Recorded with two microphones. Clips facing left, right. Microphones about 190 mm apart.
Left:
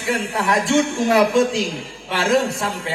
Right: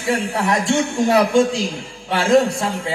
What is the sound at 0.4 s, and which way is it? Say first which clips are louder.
A man's voice: left 3 dB; 30° right (ahead or behind).